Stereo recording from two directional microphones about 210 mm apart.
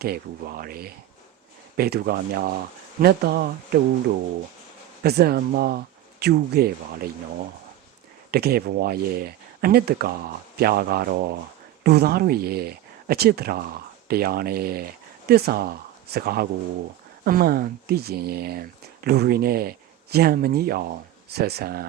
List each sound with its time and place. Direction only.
0.0 s speech: 45° right (ahead or behind)
5.0 s speech: 50° right (ahead or behind)
8.3 s speech: 50° right (ahead or behind)